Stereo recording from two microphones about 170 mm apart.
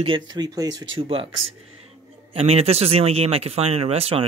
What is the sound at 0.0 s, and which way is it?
Speech, 25° right (ahead or behind).